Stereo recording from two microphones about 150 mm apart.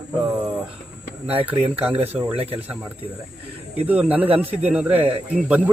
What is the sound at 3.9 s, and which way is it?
A man's voice, 10° right (ahead or behind).